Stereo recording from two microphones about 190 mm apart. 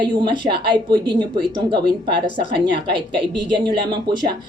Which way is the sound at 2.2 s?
40° left (ahead or behind).